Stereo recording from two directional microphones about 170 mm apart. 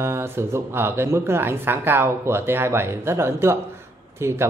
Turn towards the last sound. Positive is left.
turn(degrees=-15)  # may be behind; listen again after turning